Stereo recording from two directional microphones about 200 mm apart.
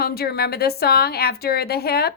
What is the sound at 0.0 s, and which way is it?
A woman's voice, 50° left (ahead or behind).